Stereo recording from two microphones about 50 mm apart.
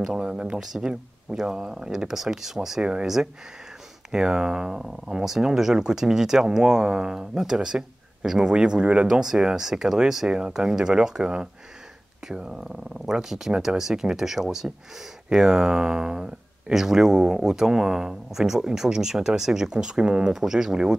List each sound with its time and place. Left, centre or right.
0.0 s speech: centre
0.6 s speech: centre
2.8 s speech: centre
4.1 s speech: centre